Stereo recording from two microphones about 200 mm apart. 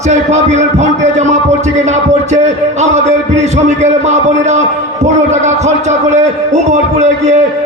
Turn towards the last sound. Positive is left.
turn(degrees=-35)  # may be behind; listen again after turning